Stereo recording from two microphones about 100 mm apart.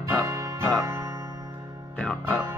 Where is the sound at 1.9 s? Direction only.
10° left (ahead or behind).